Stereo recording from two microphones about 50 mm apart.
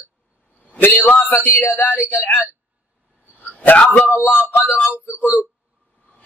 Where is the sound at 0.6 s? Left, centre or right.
Left.